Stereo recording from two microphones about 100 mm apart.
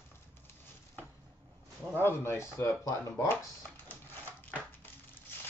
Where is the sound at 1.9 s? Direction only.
25° left (ahead or behind).